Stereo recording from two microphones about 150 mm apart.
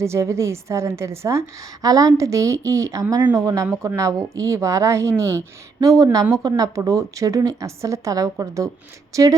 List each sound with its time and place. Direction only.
0.0 s a woman's voice: 20° right (ahead or behind)